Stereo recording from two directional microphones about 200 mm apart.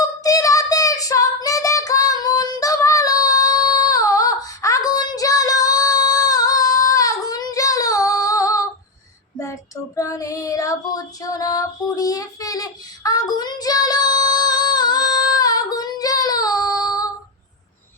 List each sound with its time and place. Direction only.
0.0 s child singing: 15° left (ahead or behind)